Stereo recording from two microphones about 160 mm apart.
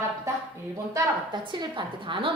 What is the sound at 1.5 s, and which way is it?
Speech, 30° right (ahead or behind).